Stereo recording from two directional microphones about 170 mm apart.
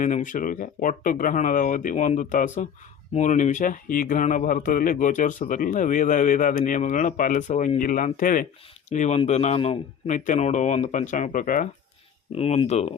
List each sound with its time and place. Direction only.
0.0 s a man's voice: 50° left (ahead or behind)
10.1 s a man's voice: 45° left (ahead or behind)
12.3 s speech: 35° left (ahead or behind)